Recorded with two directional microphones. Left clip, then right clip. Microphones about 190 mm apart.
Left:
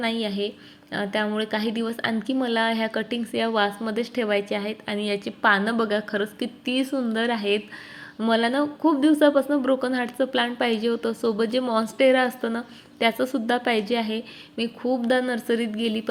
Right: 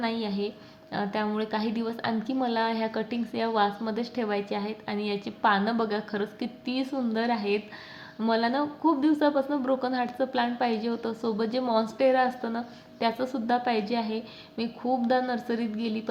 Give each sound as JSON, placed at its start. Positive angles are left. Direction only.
{"t": 0.0, "sound": "a woman's voice", "side_deg": 20}